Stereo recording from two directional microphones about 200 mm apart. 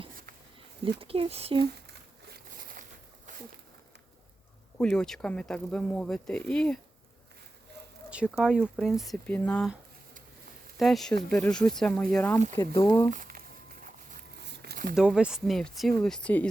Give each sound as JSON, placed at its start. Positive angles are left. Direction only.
{"t": 0.9, "sound": "speech", "side_deg": -30}
{"t": 2.3, "sound": "a sound", "side_deg": -45}
{"t": 4.8, "sound": "speech", "side_deg": 5}
{"t": 8.1, "sound": "speech", "side_deg": -5}
{"t": 10.8, "sound": "speech", "side_deg": 0}
{"t": 13.1, "sound": "speech", "side_deg": -40}
{"t": 14.4, "sound": "a sound", "side_deg": -55}
{"t": 14.9, "sound": "speech", "side_deg": -5}